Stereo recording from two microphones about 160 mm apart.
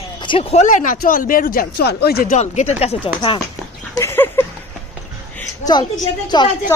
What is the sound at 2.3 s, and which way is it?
Speech, 45° left (ahead or behind).